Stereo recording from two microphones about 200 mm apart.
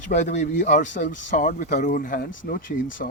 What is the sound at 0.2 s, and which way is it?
Speech, 35° left (ahead or behind).